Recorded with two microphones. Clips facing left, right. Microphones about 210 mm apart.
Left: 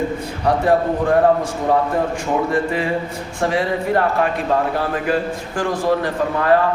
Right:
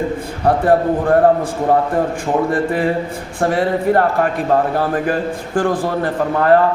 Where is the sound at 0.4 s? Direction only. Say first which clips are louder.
Right 3 dB; 55° right (ahead or behind).